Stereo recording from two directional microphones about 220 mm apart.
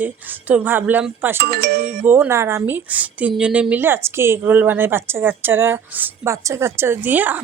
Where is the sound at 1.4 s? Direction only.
45° right (ahead or behind).